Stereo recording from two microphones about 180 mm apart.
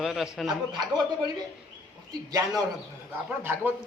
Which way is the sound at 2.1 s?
20° right (ahead or behind).